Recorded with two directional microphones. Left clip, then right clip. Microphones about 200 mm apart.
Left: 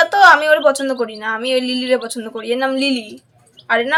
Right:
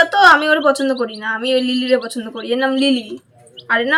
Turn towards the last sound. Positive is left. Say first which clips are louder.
# even
turn(degrees=30)  # may be behind; listen again after turning